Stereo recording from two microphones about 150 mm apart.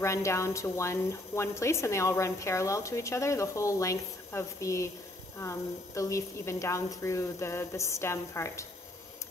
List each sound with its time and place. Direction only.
0.0 s speech: 20° left (ahead or behind)